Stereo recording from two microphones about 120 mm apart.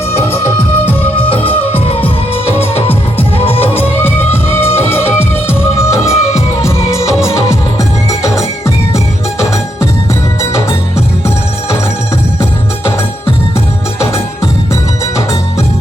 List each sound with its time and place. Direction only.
0.1 s music: 55° left (ahead or behind)
3.8 s music: 15° left (ahead or behind)
10.5 s music: 25° left (ahead or behind)
14.0 s music: 20° left (ahead or behind)